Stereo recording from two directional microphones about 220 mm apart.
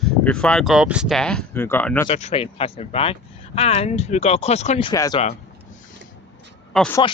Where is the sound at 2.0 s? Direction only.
25° left (ahead or behind).